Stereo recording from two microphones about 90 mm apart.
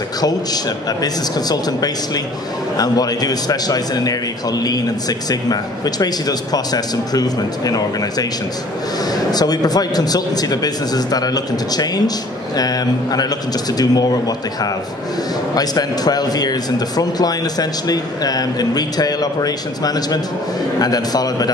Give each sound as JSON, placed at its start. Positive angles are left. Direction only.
{"t": 1.0, "sound": "speech", "side_deg": 45}
{"t": 9.3, "sound": "speech", "side_deg": 45}